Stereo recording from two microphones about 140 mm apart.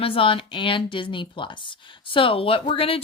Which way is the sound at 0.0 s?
40° left (ahead or behind).